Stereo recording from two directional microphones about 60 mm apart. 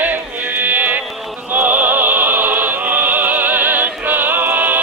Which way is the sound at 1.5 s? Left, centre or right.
Right.